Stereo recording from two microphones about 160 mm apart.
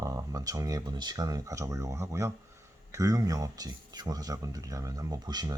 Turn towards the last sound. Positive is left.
turn(degrees=-25)  # may be behind; listen again after turning